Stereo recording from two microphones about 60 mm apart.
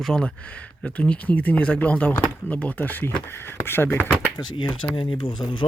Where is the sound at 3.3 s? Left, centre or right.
Left.